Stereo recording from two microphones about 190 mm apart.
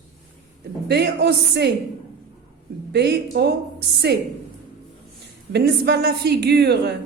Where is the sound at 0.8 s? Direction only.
60° right (ahead or behind).